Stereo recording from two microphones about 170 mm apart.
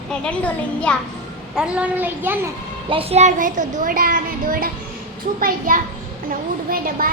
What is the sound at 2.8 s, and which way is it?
A child's voice, 35° right (ahead or behind).